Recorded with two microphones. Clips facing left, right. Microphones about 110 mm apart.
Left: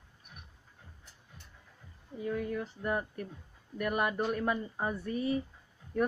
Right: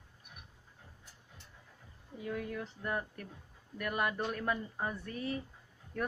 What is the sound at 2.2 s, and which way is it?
Speech, 5° left (ahead or behind).